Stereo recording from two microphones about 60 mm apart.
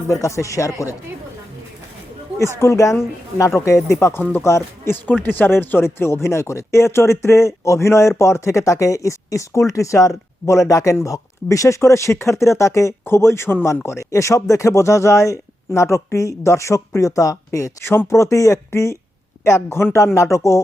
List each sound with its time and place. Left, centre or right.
0.1 s speech: left
2.4 s speech: left
4.2 s speech: left
13.8 s speech: left
17.0 s speech: left
19.6 s speech: left
20.1 s speech: left